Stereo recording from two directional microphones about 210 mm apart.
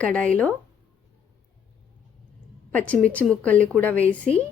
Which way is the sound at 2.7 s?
5° left (ahead or behind).